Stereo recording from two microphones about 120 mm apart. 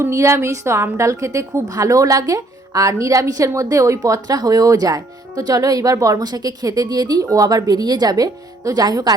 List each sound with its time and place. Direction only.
0.0 s a woman's voice: 25° right (ahead or behind)